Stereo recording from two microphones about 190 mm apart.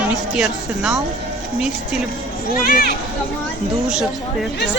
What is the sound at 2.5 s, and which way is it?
Speech, 50° left (ahead or behind).